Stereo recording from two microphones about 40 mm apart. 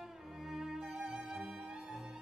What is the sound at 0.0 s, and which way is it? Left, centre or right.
Music, centre.